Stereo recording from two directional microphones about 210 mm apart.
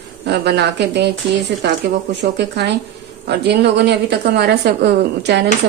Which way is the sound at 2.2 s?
55° right (ahead or behind).